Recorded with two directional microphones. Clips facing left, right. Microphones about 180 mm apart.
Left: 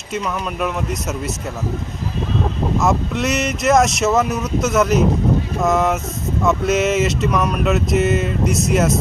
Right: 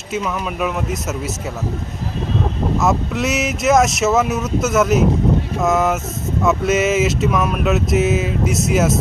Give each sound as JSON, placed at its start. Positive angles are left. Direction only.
{"t": 0.1, "sound": "speech", "side_deg": -5}
{"t": 2.7, "sound": "speech", "side_deg": -5}